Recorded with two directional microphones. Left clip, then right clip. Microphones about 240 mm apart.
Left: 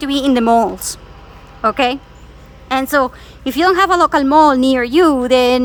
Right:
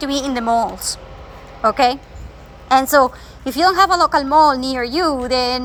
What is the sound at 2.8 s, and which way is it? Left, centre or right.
A woman's voice, centre.